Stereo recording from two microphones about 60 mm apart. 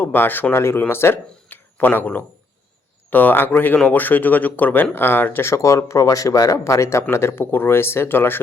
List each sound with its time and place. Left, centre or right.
0.0 s speech: left
0.5 s speech: left
5.5 s speech: left
7.1 s speech: left